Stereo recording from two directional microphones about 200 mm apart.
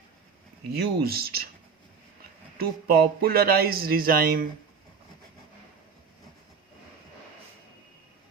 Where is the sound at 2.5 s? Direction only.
50° right (ahead or behind).